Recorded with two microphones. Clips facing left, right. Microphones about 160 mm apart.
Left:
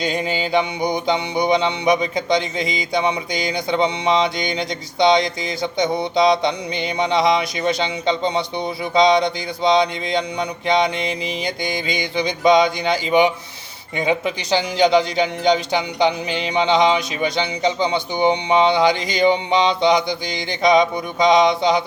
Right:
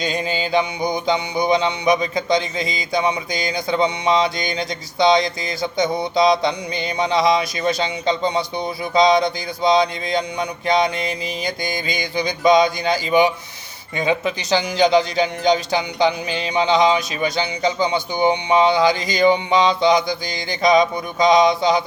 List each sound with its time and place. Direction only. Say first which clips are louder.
0.0 s music: left 1 dB; 25° left (ahead or behind)